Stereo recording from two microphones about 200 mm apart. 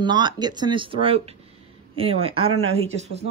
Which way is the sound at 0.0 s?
20° right (ahead or behind).